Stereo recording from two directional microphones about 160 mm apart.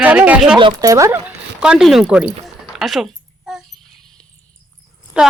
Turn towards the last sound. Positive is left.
turn(degrees=-5)  # may be behind; listen again after turning